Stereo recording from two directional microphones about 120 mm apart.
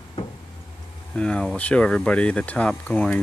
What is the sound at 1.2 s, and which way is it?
Speech, 10° left (ahead or behind).